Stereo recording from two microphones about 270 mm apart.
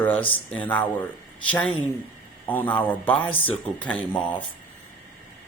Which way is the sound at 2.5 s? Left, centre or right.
Centre.